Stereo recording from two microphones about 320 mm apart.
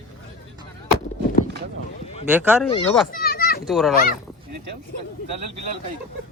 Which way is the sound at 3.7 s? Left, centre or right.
Centre.